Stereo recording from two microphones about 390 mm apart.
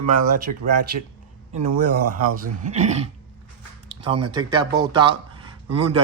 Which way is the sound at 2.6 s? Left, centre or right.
Centre.